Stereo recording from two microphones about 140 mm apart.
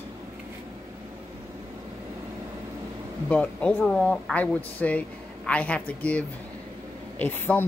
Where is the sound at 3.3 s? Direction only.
10° left (ahead or behind).